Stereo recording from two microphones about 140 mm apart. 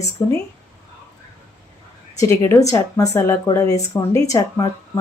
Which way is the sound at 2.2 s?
20° left (ahead or behind).